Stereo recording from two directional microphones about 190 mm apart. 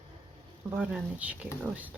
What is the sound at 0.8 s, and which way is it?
Speech, 10° right (ahead or behind).